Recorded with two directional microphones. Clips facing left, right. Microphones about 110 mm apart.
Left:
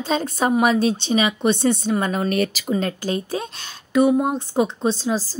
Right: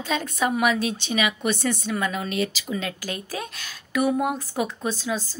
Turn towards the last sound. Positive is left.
turn(degrees=35)  # may be behind; listen again after turning